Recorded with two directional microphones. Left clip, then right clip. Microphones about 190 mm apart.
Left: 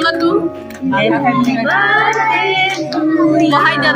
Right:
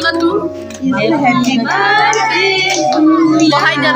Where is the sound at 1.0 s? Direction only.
20° right (ahead or behind).